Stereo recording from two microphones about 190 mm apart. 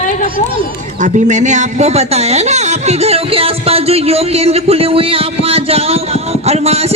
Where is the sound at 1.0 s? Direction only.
40° right (ahead or behind).